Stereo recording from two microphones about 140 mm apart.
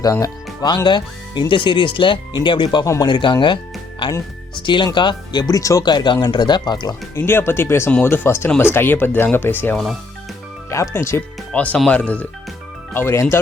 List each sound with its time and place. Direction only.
0.0 s speech: 25° left (ahead or behind)
2.8 s speech: 20° left (ahead or behind)
3.1 s speech: 35° left (ahead or behind)
7.2 s speech: 15° left (ahead or behind)
9.7 s speech: centre (ahead or behind)
10.7 s speech: 20° left (ahead or behind)